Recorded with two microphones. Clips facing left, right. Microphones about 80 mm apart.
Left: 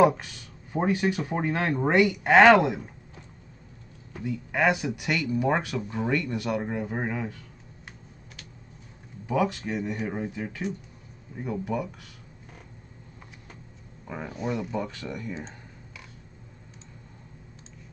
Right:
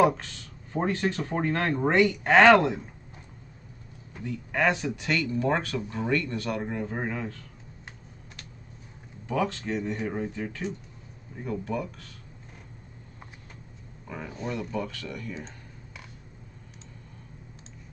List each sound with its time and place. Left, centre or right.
0.0 s speech: centre
4.2 s speech: centre
9.2 s speech: centre
14.0 s speech: centre